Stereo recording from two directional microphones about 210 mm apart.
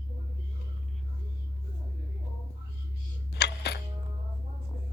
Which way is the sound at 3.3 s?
50° left (ahead or behind).